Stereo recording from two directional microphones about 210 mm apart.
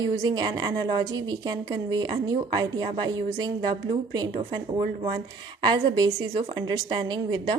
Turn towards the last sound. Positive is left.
turn(degrees=-20)  # may be behind; listen again after turning